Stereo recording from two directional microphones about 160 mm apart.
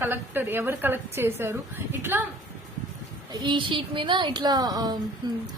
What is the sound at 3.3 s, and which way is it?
A woman's voice, 30° right (ahead or behind).